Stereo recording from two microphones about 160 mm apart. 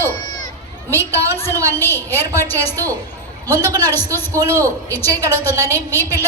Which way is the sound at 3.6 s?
25° right (ahead or behind).